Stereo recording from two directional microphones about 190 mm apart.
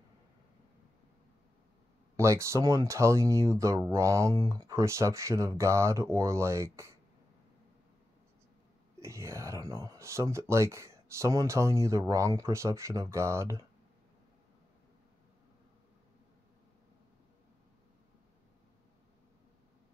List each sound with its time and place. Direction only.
2.1 s speech: 15° right (ahead or behind)
9.0 s speech: 15° right (ahead or behind)